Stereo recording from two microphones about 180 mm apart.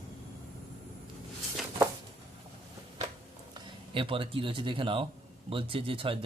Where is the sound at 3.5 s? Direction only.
30° right (ahead or behind).